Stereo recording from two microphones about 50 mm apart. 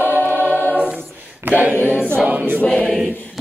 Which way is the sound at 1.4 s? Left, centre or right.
Right.